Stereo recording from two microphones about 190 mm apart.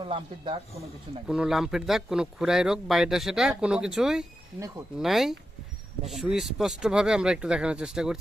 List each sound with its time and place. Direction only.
0.0 s speech: 25° right (ahead or behind)
1.3 s speech: centre (ahead or behind)